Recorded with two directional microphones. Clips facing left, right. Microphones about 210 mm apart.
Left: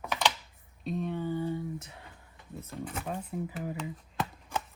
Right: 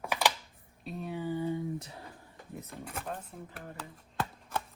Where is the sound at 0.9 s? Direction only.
5° right (ahead or behind).